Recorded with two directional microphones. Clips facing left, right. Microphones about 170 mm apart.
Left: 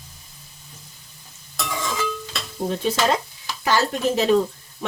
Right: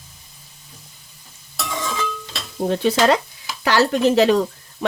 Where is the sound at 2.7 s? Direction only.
75° right (ahead or behind).